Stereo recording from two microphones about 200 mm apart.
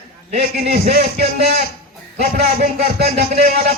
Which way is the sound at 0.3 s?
50° right (ahead or behind).